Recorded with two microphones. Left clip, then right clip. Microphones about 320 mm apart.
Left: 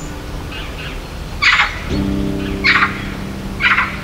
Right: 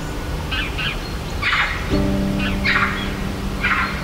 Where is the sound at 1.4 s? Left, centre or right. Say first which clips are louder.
Left 8 dB; left.